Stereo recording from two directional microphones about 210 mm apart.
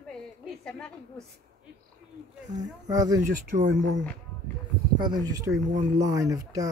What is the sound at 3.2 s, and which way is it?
Speech, 40° right (ahead or behind).